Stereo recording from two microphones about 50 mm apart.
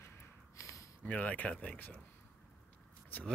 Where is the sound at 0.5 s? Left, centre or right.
Left.